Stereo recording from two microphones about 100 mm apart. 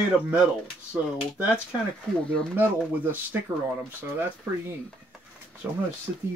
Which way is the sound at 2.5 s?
20° right (ahead or behind).